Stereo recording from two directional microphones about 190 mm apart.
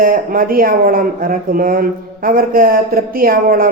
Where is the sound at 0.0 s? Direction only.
50° right (ahead or behind).